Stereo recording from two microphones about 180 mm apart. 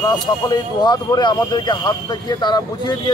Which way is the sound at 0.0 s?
20° left (ahead or behind).